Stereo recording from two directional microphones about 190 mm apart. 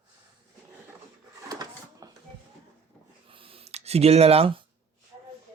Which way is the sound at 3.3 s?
30° right (ahead or behind).